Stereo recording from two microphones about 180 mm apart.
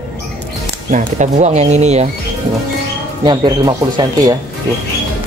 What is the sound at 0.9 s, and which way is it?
Speech, 40° right (ahead or behind).